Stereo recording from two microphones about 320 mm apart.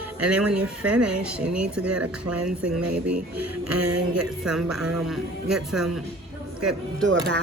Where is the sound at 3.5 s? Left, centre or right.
Right.